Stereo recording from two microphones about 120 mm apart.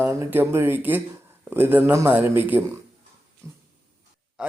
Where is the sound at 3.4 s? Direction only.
25° right (ahead or behind).